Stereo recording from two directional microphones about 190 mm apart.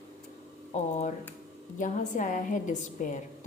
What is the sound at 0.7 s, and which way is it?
A woman's voice, 40° left (ahead or behind).